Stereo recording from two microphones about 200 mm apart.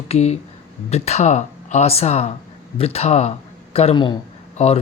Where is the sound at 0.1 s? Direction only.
35° left (ahead or behind).